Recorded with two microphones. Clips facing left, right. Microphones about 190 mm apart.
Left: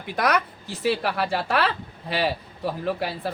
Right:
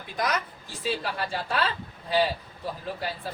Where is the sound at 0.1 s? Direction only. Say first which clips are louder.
Left 6 dB; 65° left (ahead or behind).